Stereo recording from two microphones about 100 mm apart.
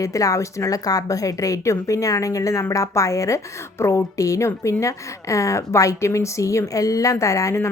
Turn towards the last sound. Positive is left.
turn(degrees=30)  # may be behind; listen again after turning